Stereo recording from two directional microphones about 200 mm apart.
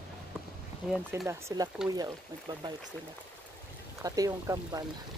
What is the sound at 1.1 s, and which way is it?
Speech, 15° right (ahead or behind).